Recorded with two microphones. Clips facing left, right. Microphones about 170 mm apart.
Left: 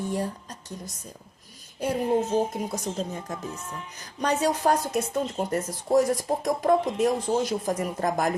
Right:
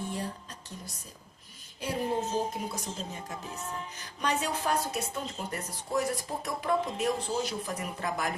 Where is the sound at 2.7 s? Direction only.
45° left (ahead or behind).